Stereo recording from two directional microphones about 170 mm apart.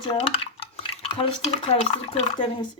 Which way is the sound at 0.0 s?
35° left (ahead or behind).